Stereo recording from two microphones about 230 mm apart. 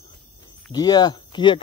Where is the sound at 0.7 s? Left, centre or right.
Centre.